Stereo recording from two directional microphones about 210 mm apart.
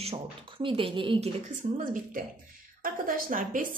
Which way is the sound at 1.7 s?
40° right (ahead or behind).